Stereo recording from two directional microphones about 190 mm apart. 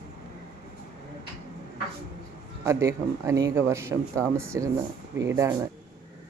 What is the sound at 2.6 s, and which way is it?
Speech, 15° right (ahead or behind).